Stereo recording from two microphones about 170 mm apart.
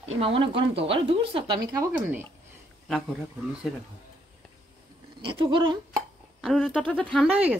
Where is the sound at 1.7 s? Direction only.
15° right (ahead or behind).